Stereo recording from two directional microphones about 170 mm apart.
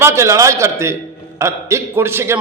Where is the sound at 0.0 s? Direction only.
15° right (ahead or behind).